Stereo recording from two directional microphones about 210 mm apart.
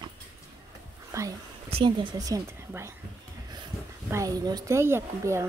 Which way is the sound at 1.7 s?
25° right (ahead or behind).